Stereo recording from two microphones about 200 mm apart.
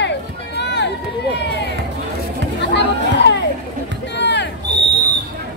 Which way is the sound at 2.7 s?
60° left (ahead or behind).